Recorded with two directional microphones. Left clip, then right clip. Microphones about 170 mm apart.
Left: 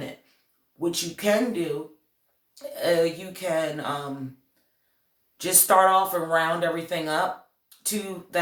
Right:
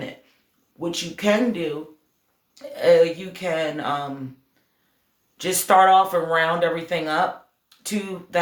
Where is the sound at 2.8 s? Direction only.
40° right (ahead or behind).